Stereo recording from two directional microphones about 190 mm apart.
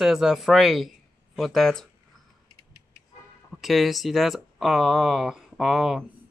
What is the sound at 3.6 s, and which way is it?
Speech, centre (ahead or behind).